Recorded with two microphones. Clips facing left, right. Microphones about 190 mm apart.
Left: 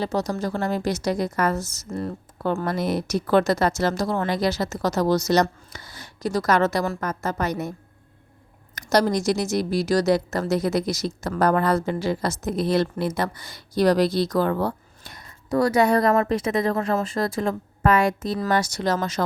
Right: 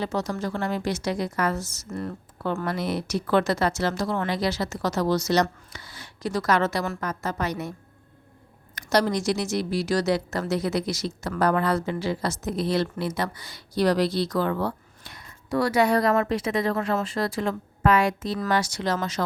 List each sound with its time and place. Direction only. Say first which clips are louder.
0.0 s a woman's voice: left 3 dB; 35° left (ahead or behind)
1.9 s speech: left 3 dB; 30° left (ahead or behind)
2.6 s a woman's voice: left 3 dB; 45° left (ahead or behind)
8.7 s a woman's voice: left 2 dB; 40° left (ahead or behind)